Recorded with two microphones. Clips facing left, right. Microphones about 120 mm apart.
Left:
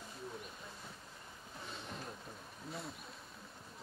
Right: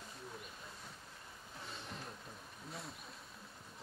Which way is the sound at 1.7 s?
Centre (ahead or behind).